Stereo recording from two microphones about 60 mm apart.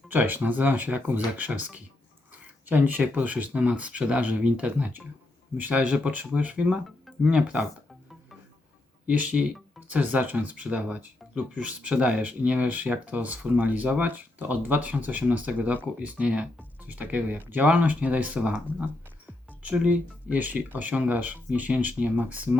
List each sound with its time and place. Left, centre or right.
0.1 s speech: right
9.0 s speech: right